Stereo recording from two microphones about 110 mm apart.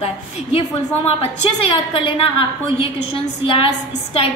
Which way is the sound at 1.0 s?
60° left (ahead or behind).